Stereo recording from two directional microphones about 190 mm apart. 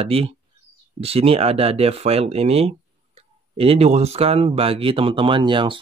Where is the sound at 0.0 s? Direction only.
30° right (ahead or behind).